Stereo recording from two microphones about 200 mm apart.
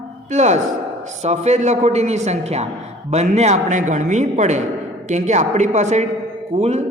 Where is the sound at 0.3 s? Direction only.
35° right (ahead or behind).